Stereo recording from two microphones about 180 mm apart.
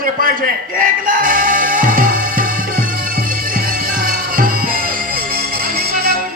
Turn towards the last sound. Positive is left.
turn(degrees=-55)  # may be behind; listen again after turning